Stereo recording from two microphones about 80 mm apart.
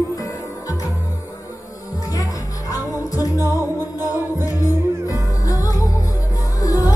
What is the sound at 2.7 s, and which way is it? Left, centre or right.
Music, left.